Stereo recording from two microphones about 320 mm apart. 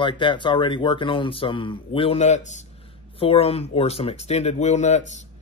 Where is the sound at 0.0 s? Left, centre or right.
Centre.